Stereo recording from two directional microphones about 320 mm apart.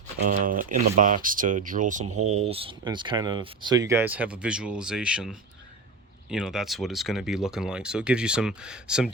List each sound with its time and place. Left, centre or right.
0.2 s speech: right
2.1 s speech: right
2.4 s speech: centre